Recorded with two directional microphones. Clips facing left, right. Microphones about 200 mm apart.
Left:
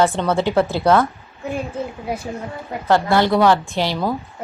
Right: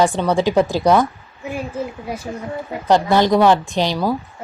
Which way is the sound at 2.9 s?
20° right (ahead or behind).